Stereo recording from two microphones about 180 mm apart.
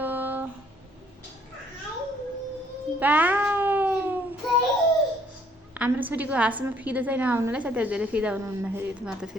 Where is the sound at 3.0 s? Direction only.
10° right (ahead or behind).